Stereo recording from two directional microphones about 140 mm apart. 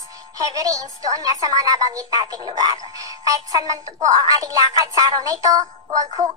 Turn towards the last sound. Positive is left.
turn(degrees=-25)  # may be behind; listen again after turning